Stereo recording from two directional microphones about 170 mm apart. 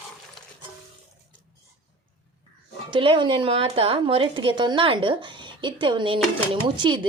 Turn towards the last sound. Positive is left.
turn(degrees=-25)  # may be behind; listen again after turning